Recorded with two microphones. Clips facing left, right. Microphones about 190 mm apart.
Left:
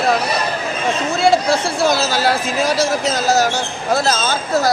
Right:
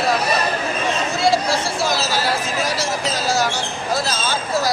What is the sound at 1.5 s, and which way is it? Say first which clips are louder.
Speech: left 5 dB; 60° left (ahead or behind).